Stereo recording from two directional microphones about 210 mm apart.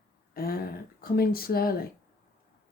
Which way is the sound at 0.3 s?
45° left (ahead or behind).